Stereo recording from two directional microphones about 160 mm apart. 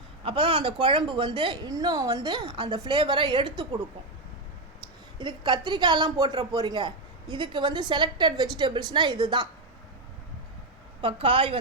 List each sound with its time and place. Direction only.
0.3 s speech: 30° right (ahead or behind)
4.8 s speech: 30° right (ahead or behind)
11.0 s a woman's voice: 35° right (ahead or behind)